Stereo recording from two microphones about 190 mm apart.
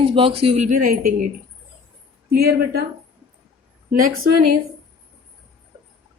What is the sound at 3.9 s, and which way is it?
Speech, 45° right (ahead or behind).